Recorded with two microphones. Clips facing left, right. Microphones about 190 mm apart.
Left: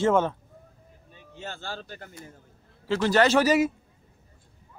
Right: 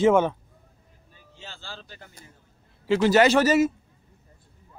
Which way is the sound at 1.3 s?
50° left (ahead or behind).